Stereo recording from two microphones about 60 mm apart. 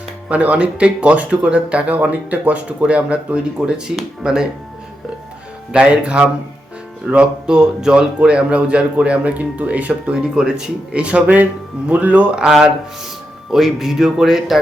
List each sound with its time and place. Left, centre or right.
0.3 s speech: right
5.7 s speech: right
10.3 s speech: centre
12.5 s speech: centre